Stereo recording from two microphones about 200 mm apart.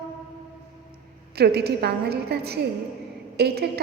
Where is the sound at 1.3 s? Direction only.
55° right (ahead or behind).